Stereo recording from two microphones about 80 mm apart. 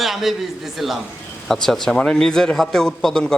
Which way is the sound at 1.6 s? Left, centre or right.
Centre.